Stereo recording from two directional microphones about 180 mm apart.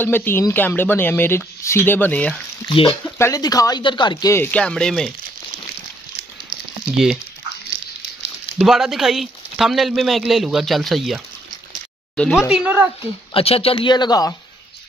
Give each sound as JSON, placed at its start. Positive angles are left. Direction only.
{"t": 0.0, "sound": "speech", "side_deg": 10}
{"t": 2.7, "sound": "speech", "side_deg": 30}
{"t": 3.2, "sound": "speech", "side_deg": 20}
{"t": 8.5, "sound": "speech", "side_deg": 0}
{"t": 12.2, "sound": "speech", "side_deg": 0}
{"t": 13.3, "sound": "speech", "side_deg": 30}